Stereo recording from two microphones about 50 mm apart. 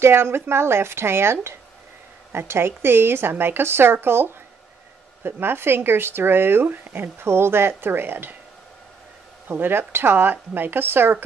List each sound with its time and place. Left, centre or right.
0.0 s a woman's voice: right
9.5 s speech: right